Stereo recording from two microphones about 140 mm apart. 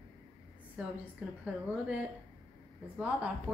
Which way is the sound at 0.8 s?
10° right (ahead or behind).